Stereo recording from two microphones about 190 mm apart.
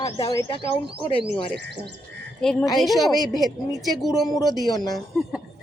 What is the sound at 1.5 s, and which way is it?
Speech, 60° right (ahead or behind).